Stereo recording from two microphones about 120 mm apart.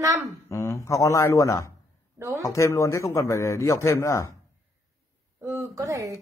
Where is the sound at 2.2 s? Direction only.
20° right (ahead or behind).